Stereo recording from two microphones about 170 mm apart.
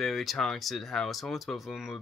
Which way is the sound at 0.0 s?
Centre (ahead or behind).